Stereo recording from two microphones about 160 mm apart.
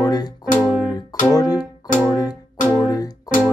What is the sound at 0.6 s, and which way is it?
Music, 5° left (ahead or behind).